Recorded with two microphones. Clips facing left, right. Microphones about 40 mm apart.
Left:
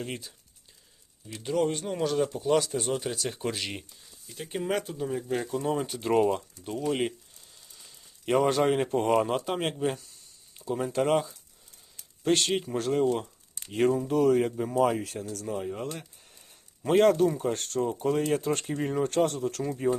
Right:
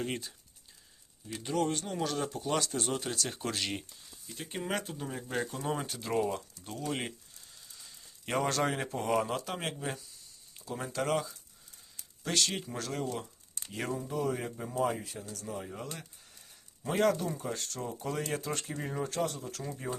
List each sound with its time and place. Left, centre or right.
0.0 s speech: centre
1.4 s speech: centre
6.0 s speech: left
6.7 s speech: centre
7.9 s a sound: centre
8.4 s speech: centre
8.7 s speech: left
10.6 s a sound: left
10.9 s speech: left
14.1 s speech: left
14.8 s speech: left
16.8 s speech: left
19.0 s speech: left